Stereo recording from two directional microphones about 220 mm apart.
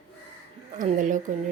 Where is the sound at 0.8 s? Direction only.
35° right (ahead or behind).